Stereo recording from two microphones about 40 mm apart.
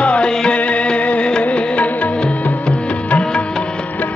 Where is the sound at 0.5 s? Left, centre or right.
Left.